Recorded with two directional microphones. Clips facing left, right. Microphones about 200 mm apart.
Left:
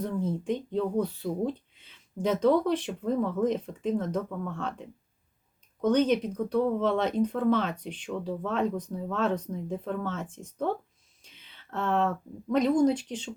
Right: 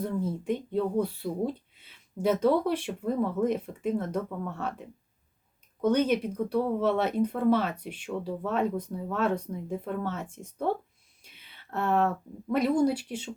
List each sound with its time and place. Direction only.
0.0 s speech: 10° right (ahead or behind)